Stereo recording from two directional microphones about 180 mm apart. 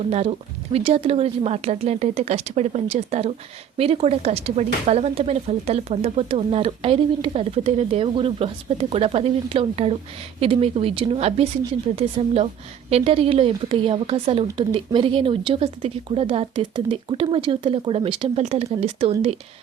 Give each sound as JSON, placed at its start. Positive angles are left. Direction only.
{"t": 0.1, "sound": "speech", "side_deg": -35}